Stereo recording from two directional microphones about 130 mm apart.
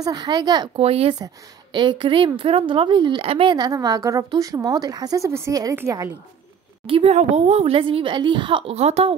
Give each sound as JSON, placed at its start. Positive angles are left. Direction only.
{"t": 0.0, "sound": "a woman's voice", "side_deg": -30}
{"t": 0.7, "sound": "a woman's voice", "side_deg": -50}
{"t": 1.2, "sound": "a woman's voice", "side_deg": -35}
{"t": 6.9, "sound": "a woman's voice", "side_deg": -50}